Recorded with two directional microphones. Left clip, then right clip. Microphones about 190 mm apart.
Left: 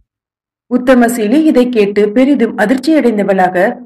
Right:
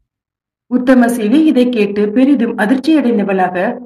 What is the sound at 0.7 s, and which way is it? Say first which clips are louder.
A woman's voice: left 2 dB; 25° left (ahead or behind).